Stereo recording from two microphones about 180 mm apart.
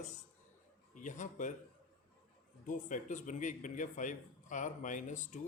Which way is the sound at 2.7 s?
45° left (ahead or behind).